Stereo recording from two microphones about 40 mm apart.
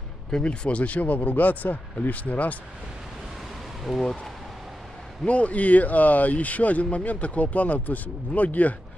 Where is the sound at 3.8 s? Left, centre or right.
Centre.